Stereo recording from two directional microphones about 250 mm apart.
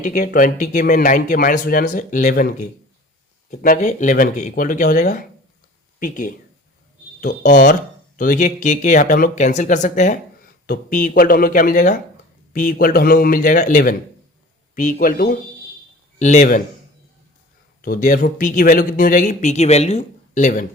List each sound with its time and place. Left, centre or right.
0.0 s a man's voice: left
17.8 s speech: left